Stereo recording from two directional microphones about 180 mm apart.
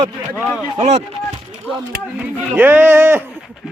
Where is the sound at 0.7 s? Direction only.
40° right (ahead or behind).